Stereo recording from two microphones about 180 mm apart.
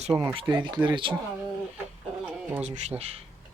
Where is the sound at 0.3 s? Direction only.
25° right (ahead or behind).